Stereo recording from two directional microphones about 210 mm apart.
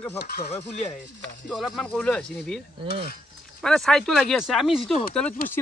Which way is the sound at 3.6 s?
Centre (ahead or behind).